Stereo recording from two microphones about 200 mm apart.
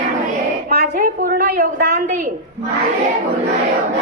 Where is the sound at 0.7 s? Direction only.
45° right (ahead or behind).